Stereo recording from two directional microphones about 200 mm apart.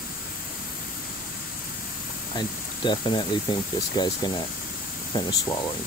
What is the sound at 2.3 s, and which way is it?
Speech, 20° left (ahead or behind).